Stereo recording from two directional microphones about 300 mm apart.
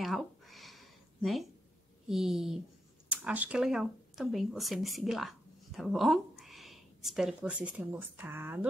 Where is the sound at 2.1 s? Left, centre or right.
Centre.